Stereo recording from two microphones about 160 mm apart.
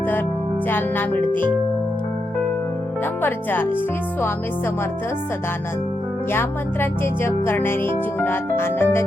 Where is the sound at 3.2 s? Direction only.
10° left (ahead or behind).